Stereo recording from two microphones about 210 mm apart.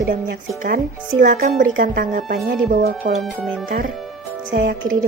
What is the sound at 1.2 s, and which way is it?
A woman's voice, 45° right (ahead or behind).